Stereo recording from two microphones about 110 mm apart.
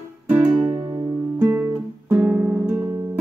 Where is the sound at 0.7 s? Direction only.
45° right (ahead or behind).